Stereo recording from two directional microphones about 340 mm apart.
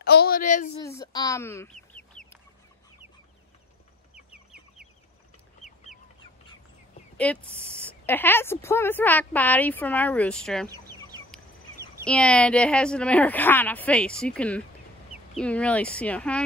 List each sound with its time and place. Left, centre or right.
0.0 s speech: left
0.8 s speech: centre
4.1 s chicken: centre
7.2 s a woman's voice: centre
11.1 s chicken: centre
12.1 s a woman's voice: centre